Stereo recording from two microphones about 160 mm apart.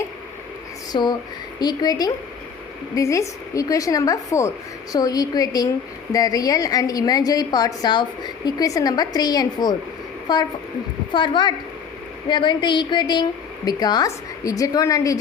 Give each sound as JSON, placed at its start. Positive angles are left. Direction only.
{"t": 0.9, "sound": "a woman's voice", "side_deg": 30}